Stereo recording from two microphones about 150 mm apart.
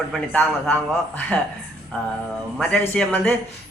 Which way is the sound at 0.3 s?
10° left (ahead or behind).